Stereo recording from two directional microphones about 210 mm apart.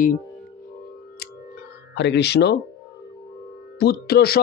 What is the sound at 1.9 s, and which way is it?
Speech, 55° left (ahead or behind).